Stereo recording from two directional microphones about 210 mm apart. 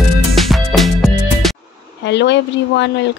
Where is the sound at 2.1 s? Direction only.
55° left (ahead or behind).